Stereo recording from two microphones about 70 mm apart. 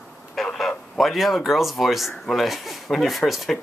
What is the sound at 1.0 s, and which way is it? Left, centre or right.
Speech, centre.